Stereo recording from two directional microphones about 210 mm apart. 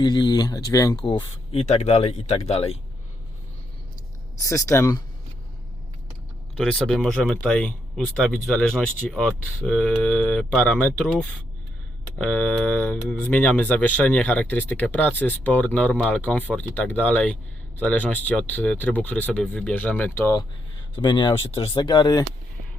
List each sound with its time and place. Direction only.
0.0 s speech: 20° left (ahead or behind)
4.4 s speech: 15° left (ahead or behind)
6.6 s speech: 5° left (ahead or behind)
10.5 s speech: 5° left (ahead or behind)
20.9 s speech: 20° left (ahead or behind)